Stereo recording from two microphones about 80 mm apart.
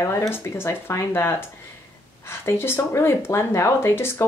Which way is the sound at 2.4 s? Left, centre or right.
Left.